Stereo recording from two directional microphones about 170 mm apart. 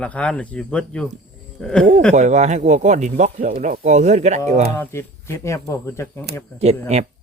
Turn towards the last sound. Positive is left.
turn(degrees=-40)  # may be behind; listen again after turning